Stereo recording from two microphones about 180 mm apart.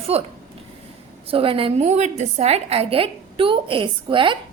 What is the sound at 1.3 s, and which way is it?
A woman's voice, 30° right (ahead or behind).